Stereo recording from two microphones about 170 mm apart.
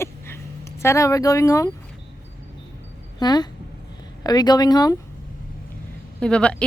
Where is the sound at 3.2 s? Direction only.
25° left (ahead or behind).